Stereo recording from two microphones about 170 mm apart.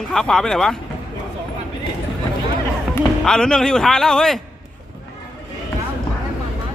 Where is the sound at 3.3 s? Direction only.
5° left (ahead or behind).